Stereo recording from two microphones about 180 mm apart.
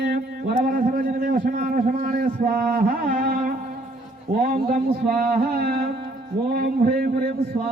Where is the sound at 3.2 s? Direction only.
55° right (ahead or behind).